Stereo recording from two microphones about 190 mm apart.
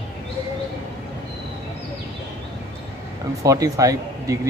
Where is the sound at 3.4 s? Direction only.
15° right (ahead or behind).